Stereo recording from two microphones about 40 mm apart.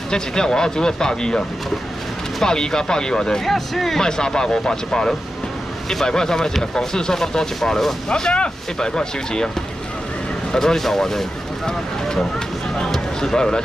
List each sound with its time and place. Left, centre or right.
0.1 s speech: centre
2.4 s speech: centre
3.4 s speech: centre
4.0 s speech: centre
8.1 s speech: left
10.5 s speech: centre
13.2 s speech: centre